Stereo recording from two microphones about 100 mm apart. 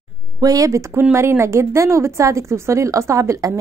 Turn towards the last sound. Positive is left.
turn(degrees=-30)  # may be behind; listen again after turning